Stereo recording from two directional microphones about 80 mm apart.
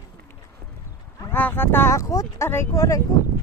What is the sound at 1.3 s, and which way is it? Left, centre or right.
Speech, left.